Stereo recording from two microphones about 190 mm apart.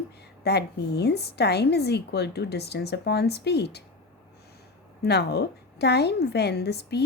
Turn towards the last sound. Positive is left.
turn(degrees=60)  # may be behind; listen again after turning